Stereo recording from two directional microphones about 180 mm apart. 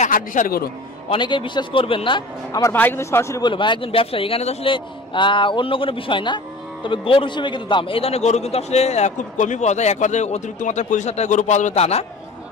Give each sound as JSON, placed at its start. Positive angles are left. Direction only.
{"t": 0.0, "sound": "a man's voice", "side_deg": 45}
{"t": 1.0, "sound": "a man's voice", "side_deg": 25}
{"t": 2.7, "sound": "a man's voice", "side_deg": 10}